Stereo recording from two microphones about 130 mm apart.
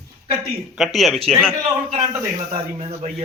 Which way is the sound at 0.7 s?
Centre (ahead or behind).